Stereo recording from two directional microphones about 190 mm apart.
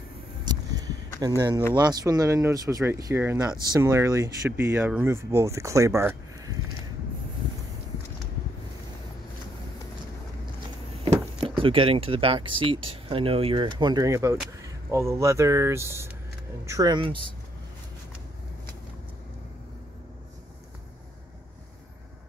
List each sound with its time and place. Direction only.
0.5 s a sound: 20° right (ahead or behind)
1.2 s speech: 20° right (ahead or behind)
11.4 s speech: 30° right (ahead or behind)